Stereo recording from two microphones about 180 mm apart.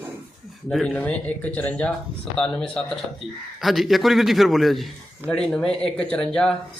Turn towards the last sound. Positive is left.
turn(degrees=5)  # may be behind; listen again after turning